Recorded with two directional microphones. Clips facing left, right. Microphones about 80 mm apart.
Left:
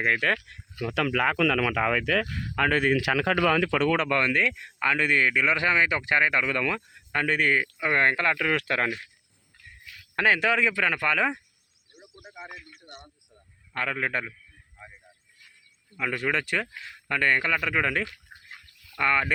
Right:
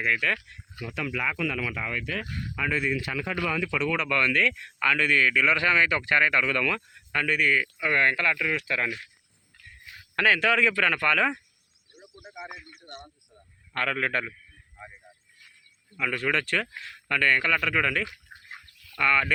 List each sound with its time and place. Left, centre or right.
0.0 s speech: left
0.8 s speech: left
2.6 s speech: left
3.0 s speech: left
4.2 s speech: centre
8.4 s speech: left
9.8 s a sound: right
10.2 s a man's voice: left
12.3 s speech: centre
13.7 s a man's voice: centre
16.0 s speech: centre